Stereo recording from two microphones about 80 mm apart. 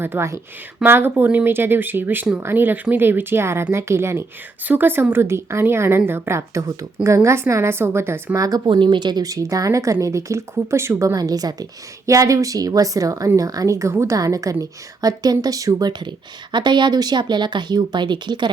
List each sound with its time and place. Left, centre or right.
0.0 s a woman's voice: right
8.4 s speech: right
8.6 s speech: right
11.2 s speech: right
16.5 s speech: right